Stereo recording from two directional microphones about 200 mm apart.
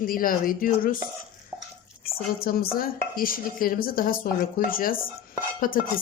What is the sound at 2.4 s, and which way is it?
Speech, 50° left (ahead or behind).